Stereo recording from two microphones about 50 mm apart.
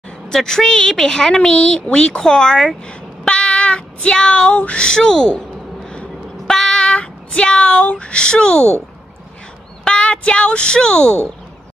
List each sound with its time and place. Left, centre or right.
0.3 s a woman's voice: centre
2.9 s a sound: centre
4.6 s a woman's voice: left
6.4 s a sound: centre
6.9 s speech: centre
9.8 s a woman's voice: centre